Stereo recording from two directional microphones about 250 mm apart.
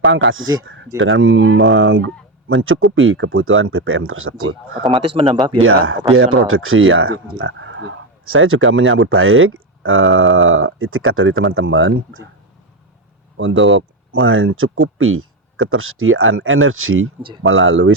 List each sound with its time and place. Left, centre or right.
0.0 s speech: right
4.9 s speech: right
6.1 s speech: right
13.3 s speech: right